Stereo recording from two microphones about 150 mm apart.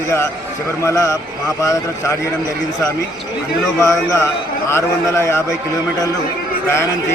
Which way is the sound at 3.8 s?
20° left (ahead or behind).